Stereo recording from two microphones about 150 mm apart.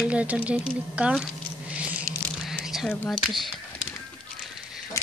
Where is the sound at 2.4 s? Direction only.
Centre (ahead or behind).